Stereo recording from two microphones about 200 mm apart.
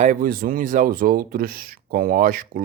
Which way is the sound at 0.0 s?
40° right (ahead or behind).